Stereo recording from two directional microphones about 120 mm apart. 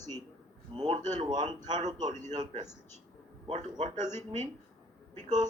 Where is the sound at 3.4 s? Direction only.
70° right (ahead or behind).